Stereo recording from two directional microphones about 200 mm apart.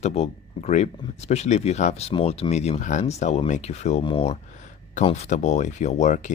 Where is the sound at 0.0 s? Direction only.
30° left (ahead or behind).